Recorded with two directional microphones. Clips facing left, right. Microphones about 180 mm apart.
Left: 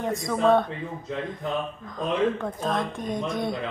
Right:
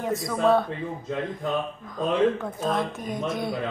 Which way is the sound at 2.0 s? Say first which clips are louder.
Right 2 dB; centre (ahead or behind).